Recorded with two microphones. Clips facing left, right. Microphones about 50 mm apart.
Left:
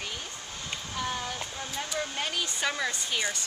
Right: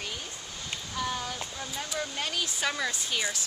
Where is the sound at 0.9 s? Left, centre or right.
Left.